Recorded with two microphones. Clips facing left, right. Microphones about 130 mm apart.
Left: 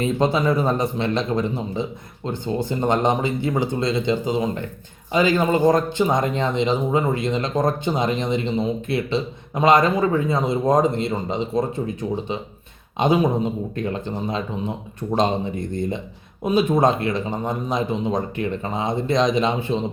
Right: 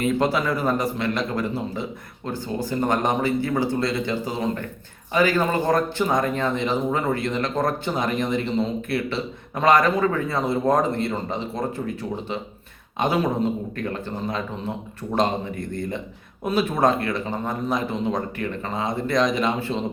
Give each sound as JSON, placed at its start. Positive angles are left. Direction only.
{"t": 0.0, "sound": "speech", "side_deg": 20}